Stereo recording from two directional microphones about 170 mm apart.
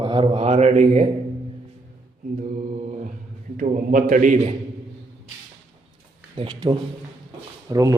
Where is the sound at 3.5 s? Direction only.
50° right (ahead or behind).